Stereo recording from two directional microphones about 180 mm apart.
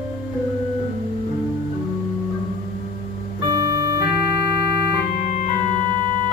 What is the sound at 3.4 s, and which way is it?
Organ, 20° right (ahead or behind).